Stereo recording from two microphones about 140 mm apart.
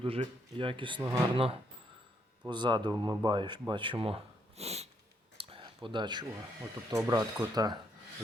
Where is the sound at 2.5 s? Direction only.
35° right (ahead or behind); by 4.9 s 50° right (ahead or behind).